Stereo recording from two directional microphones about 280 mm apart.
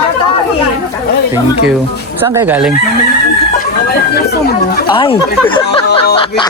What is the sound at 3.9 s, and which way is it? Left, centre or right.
Speech, left.